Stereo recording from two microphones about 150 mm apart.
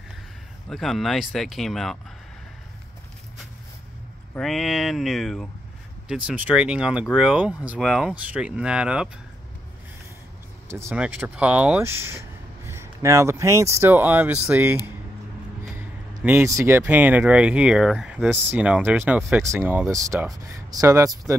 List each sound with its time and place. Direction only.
0.7 s speech: centre (ahead or behind)
4.4 s speech: centre (ahead or behind)
10.7 s speech: 15° right (ahead or behind)
16.3 s speech: 15° right (ahead or behind)